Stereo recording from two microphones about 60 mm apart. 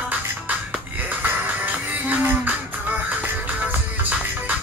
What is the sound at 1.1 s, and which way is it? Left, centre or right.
Music, right.